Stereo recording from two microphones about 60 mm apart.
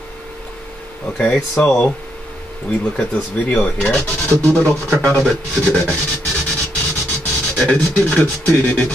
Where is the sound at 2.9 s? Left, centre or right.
Left.